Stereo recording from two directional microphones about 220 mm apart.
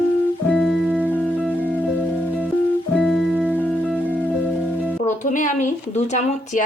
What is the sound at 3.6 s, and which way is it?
Music, 5° left (ahead or behind).